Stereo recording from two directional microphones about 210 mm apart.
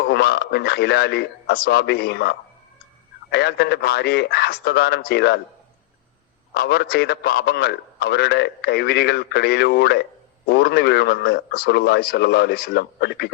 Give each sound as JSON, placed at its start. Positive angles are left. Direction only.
{"t": 0.0, "sound": "a man's voice", "side_deg": 50}
{"t": 6.5, "sound": "a man's voice", "side_deg": 50}